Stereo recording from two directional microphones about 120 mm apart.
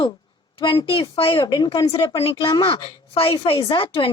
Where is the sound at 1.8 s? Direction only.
50° left (ahead or behind).